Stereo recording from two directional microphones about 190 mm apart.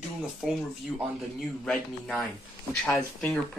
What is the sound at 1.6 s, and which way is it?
Speech, centre (ahead or behind).